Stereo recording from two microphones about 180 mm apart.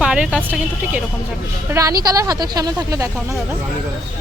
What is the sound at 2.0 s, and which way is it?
Speech, 20° right (ahead or behind).